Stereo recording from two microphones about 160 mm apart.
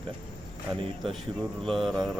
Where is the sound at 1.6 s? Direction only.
Centre (ahead or behind).